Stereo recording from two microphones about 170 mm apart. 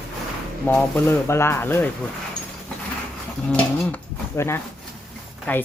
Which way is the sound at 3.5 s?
10° left (ahead or behind).